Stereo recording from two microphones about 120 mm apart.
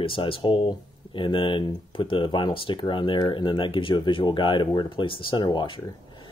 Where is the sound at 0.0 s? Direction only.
45° left (ahead or behind).